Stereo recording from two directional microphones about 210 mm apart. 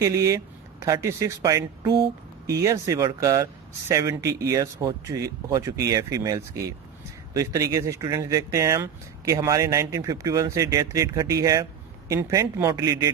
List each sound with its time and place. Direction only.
0.0 s speech: 15° right (ahead or behind)